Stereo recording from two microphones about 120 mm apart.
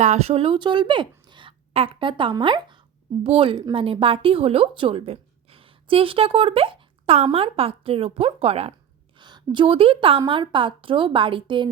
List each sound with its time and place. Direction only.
0.0 s a woman's voice: 70° right (ahead or behind)
9.1 s a woman's voice: 40° right (ahead or behind)